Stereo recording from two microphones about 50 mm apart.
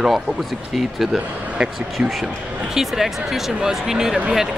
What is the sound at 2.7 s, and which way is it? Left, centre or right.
Speech, centre.